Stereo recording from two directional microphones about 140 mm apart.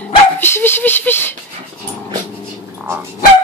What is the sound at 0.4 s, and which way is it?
Speech, 15° left (ahead or behind).